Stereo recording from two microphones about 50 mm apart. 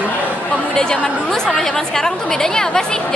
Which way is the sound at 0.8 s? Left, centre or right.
Centre.